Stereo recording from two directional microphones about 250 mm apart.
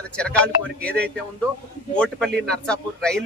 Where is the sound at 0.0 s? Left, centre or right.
Centre.